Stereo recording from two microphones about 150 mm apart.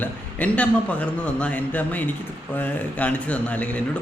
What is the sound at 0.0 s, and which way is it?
A man's voice, 10° left (ahead or behind).